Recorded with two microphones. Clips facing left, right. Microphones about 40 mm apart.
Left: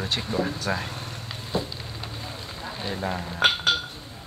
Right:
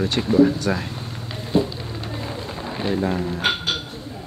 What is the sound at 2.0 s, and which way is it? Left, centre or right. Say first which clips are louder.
Run: right 9 dB; right.